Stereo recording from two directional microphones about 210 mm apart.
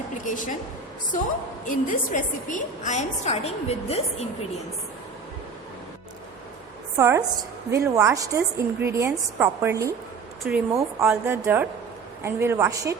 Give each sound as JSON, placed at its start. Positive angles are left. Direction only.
{"t": 0.3, "sound": "a woman's voice", "side_deg": 40}
{"t": 1.6, "sound": "a woman's voice", "side_deg": 40}
{"t": 6.9, "sound": "a woman's voice", "side_deg": -15}